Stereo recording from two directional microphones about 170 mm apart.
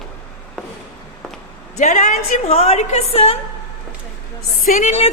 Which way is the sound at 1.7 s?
45° left (ahead or behind).